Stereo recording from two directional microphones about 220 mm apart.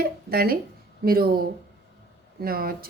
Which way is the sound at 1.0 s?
45° right (ahead or behind).